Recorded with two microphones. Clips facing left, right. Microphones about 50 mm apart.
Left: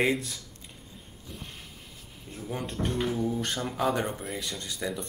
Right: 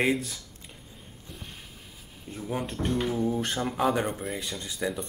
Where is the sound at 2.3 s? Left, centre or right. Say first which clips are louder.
Right 3 dB; centre.